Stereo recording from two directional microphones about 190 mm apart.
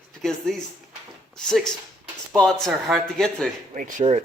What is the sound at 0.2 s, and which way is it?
Speech, centre (ahead or behind).